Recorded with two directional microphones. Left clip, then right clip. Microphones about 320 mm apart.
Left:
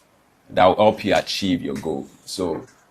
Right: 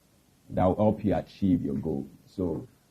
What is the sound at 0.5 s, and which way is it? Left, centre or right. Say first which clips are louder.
Speech: left 10 dB; centre.